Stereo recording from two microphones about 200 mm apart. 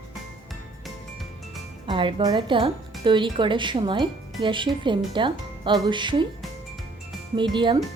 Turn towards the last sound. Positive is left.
turn(degrees=-25)  # may be behind; listen again after turning